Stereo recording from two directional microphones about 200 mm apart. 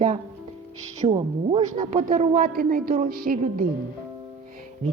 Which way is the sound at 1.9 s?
45° right (ahead or behind).